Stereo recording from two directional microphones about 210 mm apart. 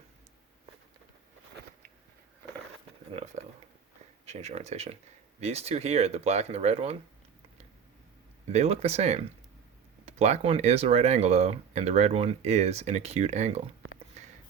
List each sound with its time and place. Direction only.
3.1 s speech: 30° right (ahead or behind)
8.4 s speech: 30° right (ahead or behind)
14.2 s a sound: 30° right (ahead or behind)